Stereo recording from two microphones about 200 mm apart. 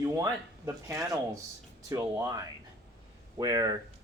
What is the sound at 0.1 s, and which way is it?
Speech, 15° right (ahead or behind).